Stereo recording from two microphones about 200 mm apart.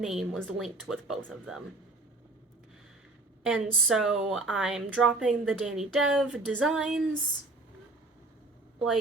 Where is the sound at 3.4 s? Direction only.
Centre (ahead or behind).